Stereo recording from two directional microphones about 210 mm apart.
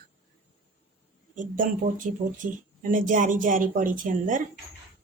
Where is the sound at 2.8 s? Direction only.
40° right (ahead or behind).